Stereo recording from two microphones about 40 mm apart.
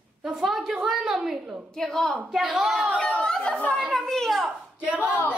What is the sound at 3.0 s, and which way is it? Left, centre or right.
Chatter, left.